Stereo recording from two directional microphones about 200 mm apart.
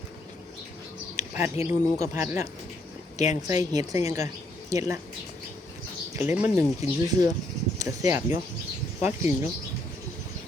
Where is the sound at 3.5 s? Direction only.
20° right (ahead or behind).